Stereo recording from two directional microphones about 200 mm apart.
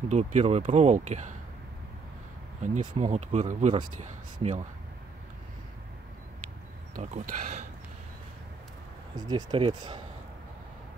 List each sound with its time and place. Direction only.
0.1 s speech: 35° right (ahead or behind)
2.6 s speech: 40° right (ahead or behind)
7.0 s speech: 40° right (ahead or behind)
9.1 s speech: 20° right (ahead or behind)